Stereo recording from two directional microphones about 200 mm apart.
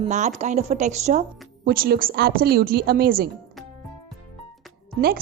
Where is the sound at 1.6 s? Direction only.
50° right (ahead or behind).